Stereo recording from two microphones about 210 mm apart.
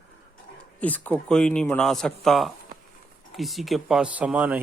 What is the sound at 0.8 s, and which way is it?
Speech, 10° left (ahead or behind).